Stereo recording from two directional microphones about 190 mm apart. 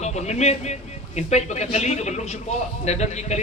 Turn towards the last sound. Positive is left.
turn(degrees=35)  # may be behind; listen again after turning